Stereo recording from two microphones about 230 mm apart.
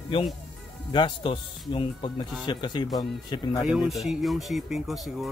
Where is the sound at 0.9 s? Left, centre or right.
Left.